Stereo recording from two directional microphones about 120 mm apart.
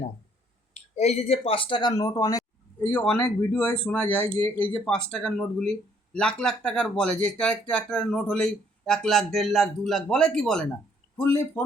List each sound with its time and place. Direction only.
0.7 s speech: 65° left (ahead or behind); by 2.4 s 30° left (ahead or behind)
2.8 s speech: 10° left (ahead or behind)
11.2 s speech: 20° left (ahead or behind)